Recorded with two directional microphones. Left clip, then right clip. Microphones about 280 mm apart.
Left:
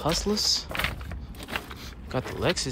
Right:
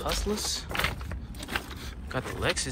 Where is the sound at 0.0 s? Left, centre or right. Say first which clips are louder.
Left 5 dB; left.